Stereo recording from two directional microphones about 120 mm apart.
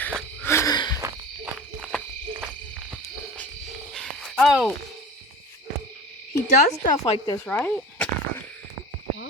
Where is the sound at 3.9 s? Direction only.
Centre (ahead or behind).